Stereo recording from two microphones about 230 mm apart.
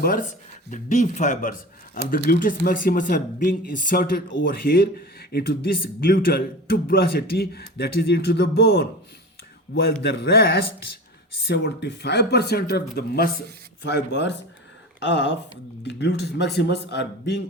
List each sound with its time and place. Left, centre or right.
0.0 s speech: left
10.0 s speech: left